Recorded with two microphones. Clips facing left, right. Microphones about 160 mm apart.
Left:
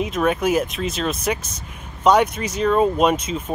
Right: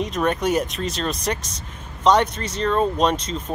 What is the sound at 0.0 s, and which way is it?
Speech, 5° left (ahead or behind).